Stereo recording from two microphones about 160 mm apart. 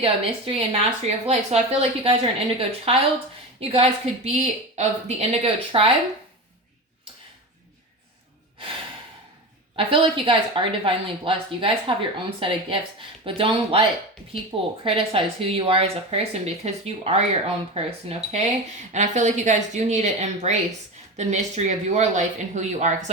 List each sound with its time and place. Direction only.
0.0 s speech: 35° right (ahead or behind)
9.7 s speech: 35° right (ahead or behind)
14.8 s speech: 35° right (ahead or behind)